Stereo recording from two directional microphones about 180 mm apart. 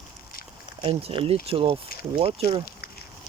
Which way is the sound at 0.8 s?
35° right (ahead or behind).